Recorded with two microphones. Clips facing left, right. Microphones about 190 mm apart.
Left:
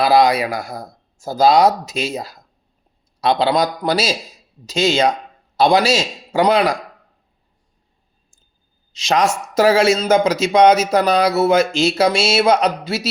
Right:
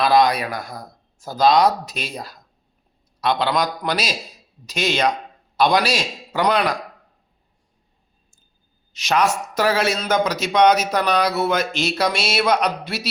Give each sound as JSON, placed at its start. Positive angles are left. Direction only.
{"t": 0.2, "sound": "speech", "side_deg": 25}
{"t": 8.9, "sound": "speech", "side_deg": 30}